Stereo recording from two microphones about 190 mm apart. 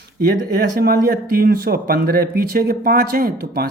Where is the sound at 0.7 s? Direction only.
50° right (ahead or behind).